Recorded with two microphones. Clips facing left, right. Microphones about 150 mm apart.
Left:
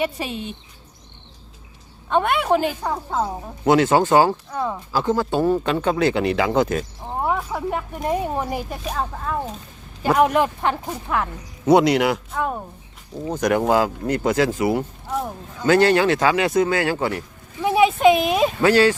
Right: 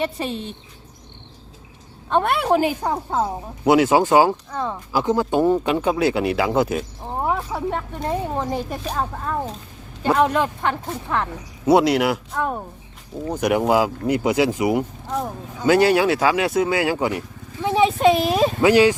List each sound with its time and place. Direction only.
0.0 s a woman's voice: 5° left (ahead or behind)
2.0 s a woman's voice: centre (ahead or behind)
4.5 s a woman's voice: 5° left (ahead or behind)
4.9 s speech: 15° right (ahead or behind)
7.8 s speech: 15° left (ahead or behind); by 9.5 s centre (ahead or behind)
10.0 s speech: 10° left (ahead or behind)
11.6 s a woman's voice: centre (ahead or behind)
17.6 s a sound: 15° left (ahead or behind)
17.8 s a woman's voice: centre (ahead or behind)
18.6 s speech: 15° right (ahead or behind)